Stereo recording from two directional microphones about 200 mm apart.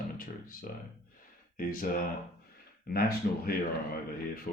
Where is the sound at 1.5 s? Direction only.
45° left (ahead or behind).